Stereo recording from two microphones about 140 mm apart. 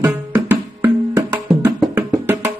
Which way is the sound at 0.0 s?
20° right (ahead or behind).